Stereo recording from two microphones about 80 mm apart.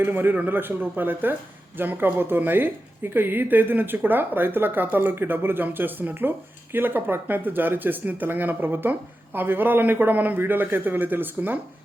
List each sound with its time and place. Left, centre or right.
0.0 s speech: right